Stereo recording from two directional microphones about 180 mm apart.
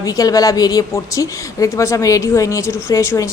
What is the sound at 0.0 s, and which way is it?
A woman's voice, 20° left (ahead or behind).